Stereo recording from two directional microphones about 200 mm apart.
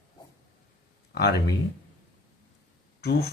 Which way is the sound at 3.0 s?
50° left (ahead or behind).